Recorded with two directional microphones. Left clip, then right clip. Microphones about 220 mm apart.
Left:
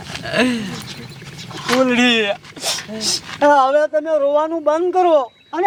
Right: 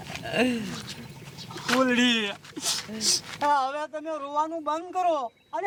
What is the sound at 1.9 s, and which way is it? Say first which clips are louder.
Speech: left 9 dB; 25° left (ahead or behind).